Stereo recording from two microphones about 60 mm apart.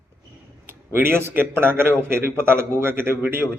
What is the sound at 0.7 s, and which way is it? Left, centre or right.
A man's voice, right.